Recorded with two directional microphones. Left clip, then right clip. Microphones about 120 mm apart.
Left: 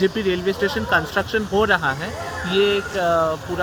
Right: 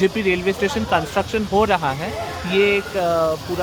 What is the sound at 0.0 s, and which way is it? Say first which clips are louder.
Speech: right 2 dB; 25° right (ahead or behind).